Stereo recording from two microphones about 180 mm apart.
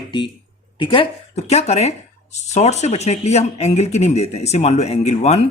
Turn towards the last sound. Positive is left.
turn(degrees=35)  # may be behind; listen again after turning